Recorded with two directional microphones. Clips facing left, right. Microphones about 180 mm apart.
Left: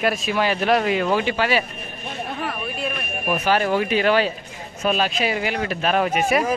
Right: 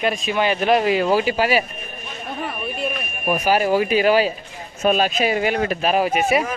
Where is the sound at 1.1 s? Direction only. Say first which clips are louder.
Right 3 dB; 35° right (ahead or behind).